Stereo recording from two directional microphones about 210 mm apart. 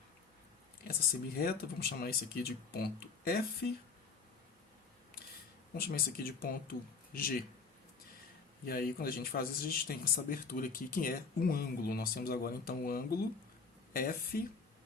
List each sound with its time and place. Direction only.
1.4 s speech: 45° left (ahead or behind)
5.7 s speech: 45° left (ahead or behind)
8.6 s speech: 45° left (ahead or behind)